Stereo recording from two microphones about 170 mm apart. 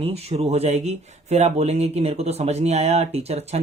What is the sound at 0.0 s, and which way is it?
Speech, 35° right (ahead or behind).